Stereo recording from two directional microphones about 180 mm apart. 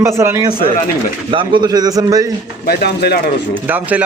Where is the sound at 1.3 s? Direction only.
30° right (ahead or behind).